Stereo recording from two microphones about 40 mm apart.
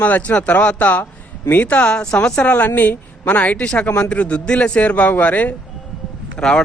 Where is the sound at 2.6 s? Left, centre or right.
Left.